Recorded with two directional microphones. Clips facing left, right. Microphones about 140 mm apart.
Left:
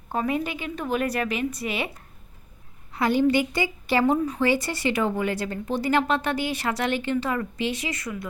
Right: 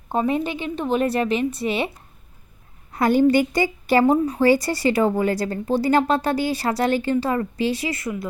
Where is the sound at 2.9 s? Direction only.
45° right (ahead or behind).